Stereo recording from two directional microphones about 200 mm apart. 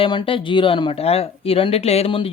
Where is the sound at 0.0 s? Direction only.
25° left (ahead or behind).